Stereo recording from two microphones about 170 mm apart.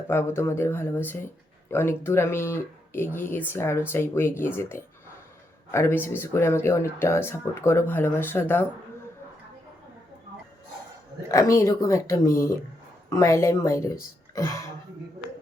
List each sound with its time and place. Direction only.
0.1 s speech: 15° left (ahead or behind)
11.3 s speech: 15° left (ahead or behind)